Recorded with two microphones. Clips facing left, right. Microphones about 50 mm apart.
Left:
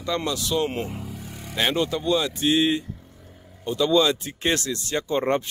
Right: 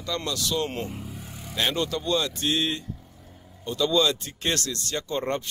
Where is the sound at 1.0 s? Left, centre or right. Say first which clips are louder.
Left 2 dB; left.